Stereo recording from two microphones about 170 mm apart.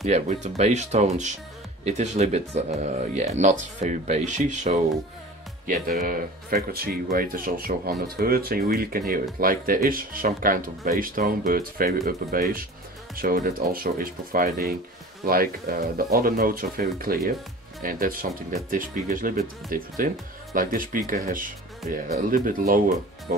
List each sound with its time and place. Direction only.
0.0 s speech: 40° right (ahead or behind)
5.7 s speech: 55° right (ahead or behind)